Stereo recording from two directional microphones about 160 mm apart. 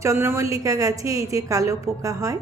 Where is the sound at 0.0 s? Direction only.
15° right (ahead or behind).